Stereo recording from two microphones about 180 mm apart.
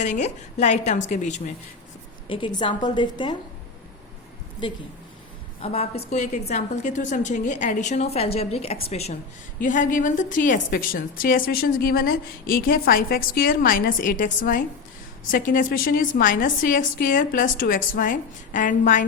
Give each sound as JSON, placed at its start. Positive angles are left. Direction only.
{"t": 0.0, "sound": "a woman's voice", "side_deg": 40}
{"t": 2.3, "sound": "a woman's voice", "side_deg": 25}
{"t": 5.6, "sound": "a woman's voice", "side_deg": 35}
{"t": 9.6, "sound": "a woman's voice", "side_deg": 50}